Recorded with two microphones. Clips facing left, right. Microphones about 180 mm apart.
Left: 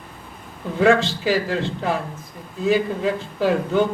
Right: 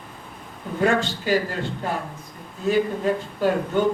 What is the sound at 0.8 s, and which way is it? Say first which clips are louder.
A woman's voice: left 5 dB; 90° left.